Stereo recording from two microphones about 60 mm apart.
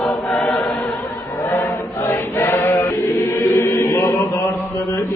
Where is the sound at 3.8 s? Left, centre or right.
Left.